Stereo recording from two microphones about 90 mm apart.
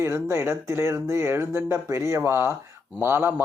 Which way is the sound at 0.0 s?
30° right (ahead or behind).